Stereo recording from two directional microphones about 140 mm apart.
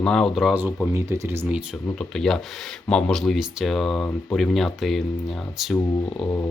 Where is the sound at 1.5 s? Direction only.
5° right (ahead or behind).